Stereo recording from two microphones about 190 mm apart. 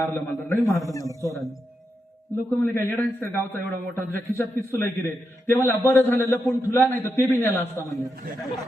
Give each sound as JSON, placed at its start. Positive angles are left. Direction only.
{"t": 0.0, "sound": "a man's voice", "side_deg": 10}
{"t": 2.6, "sound": "a man's voice", "side_deg": 10}